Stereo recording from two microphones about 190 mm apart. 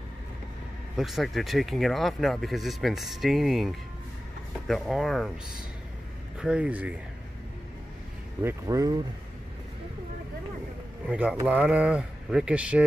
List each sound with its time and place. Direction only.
0.9 s speech: centre (ahead or behind)
6.4 s speech: 5° right (ahead or behind)
8.4 s speech: 15° right (ahead or behind)
11.1 s speech: 5° right (ahead or behind)